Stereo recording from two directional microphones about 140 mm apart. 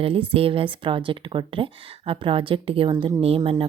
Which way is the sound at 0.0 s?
40° right (ahead or behind).